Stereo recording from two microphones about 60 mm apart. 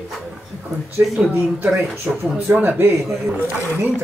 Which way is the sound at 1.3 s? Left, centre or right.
Right.